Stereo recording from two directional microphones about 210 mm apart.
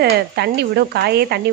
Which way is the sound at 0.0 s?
50° right (ahead or behind).